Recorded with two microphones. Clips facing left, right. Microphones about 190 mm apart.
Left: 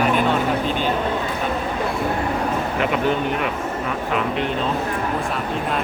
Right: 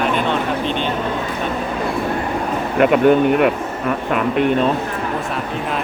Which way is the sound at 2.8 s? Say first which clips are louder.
Right 10 dB; 55° right (ahead or behind).